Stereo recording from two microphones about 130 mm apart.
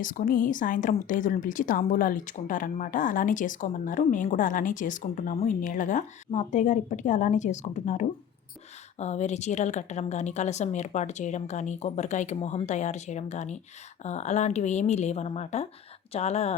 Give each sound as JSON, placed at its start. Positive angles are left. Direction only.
{"t": 0.0, "sound": "a woman's voice", "side_deg": 90}